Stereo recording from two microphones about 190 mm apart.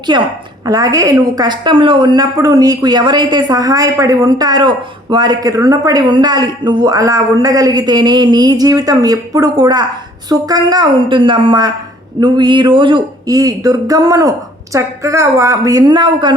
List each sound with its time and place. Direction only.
0.1 s speech: 25° right (ahead or behind)